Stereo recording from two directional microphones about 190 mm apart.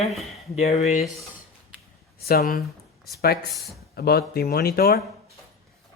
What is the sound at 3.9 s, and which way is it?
Speech, 55° left (ahead or behind).